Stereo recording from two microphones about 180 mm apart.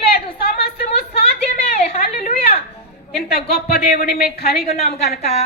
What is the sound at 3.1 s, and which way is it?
A woman's voice, 60° left (ahead or behind).